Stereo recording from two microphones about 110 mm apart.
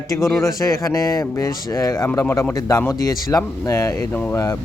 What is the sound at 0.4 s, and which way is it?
Speech, 30° left (ahead or behind).